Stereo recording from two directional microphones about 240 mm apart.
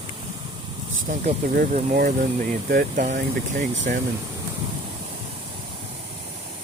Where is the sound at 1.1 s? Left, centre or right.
Right.